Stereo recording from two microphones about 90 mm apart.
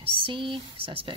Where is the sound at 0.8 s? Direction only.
80° right.